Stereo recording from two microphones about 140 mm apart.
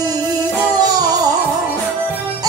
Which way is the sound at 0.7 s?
30° right (ahead or behind).